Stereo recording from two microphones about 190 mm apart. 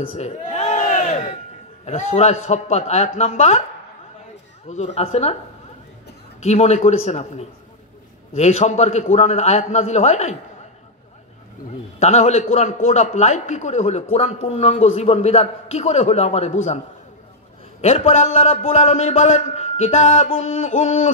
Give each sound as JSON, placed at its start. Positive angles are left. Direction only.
{"t": 0.0, "sound": "a sound", "side_deg": 35}
{"t": 1.9, "sound": "a man's voice", "side_deg": 35}
{"t": 4.6, "sound": "a man's voice", "side_deg": 35}
{"t": 6.4, "sound": "a man's voice", "side_deg": 35}
{"t": 12.0, "sound": "a man's voice", "side_deg": 35}
{"t": 17.8, "sound": "a man's voice", "side_deg": 35}